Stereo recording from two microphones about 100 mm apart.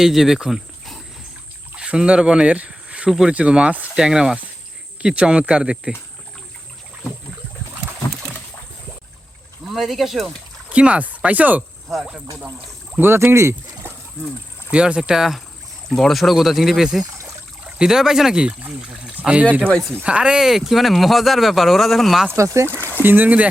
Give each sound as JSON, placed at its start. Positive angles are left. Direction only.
{"t": 0.0, "sound": "speech", "side_deg": -5}
{"t": 9.6, "sound": "speech", "side_deg": 0}
{"t": 10.7, "sound": "speech", "side_deg": -10}
{"t": 11.9, "sound": "speech", "side_deg": -5}
{"t": 13.0, "sound": "speech", "side_deg": -20}
{"t": 14.7, "sound": "speech", "side_deg": -10}
{"t": 22.4, "sound": "speech", "side_deg": -30}
{"t": 22.7, "sound": "speech", "side_deg": 20}
{"t": 23.0, "sound": "speech", "side_deg": -20}